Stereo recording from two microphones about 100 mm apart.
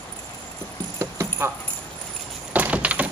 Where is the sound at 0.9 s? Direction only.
30° right (ahead or behind).